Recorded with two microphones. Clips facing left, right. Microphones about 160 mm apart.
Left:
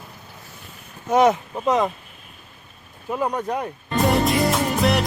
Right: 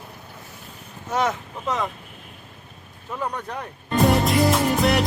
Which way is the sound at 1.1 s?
15° left (ahead or behind).